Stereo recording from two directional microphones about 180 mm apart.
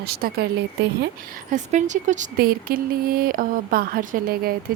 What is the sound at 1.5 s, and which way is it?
Speech, 40° right (ahead or behind).